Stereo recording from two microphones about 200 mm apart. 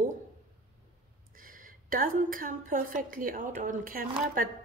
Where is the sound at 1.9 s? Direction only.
45° right (ahead or behind).